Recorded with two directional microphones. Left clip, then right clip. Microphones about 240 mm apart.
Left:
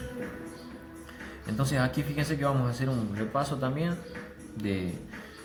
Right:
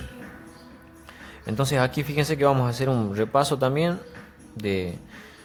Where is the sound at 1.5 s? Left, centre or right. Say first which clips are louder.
Right 6 dB; right.